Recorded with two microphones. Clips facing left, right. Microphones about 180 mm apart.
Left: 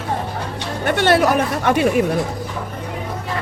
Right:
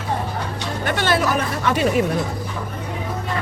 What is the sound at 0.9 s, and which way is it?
Speech, 65° left (ahead or behind).